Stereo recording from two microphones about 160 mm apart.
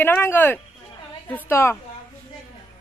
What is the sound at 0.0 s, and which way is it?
A woman's voice, 15° left (ahead or behind).